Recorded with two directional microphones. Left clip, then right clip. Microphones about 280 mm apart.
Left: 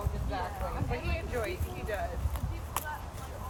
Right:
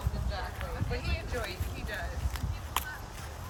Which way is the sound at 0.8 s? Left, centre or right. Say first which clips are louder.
Left 1 dB; left.